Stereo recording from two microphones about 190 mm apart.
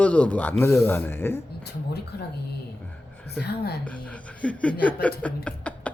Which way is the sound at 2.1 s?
55° left (ahead or behind).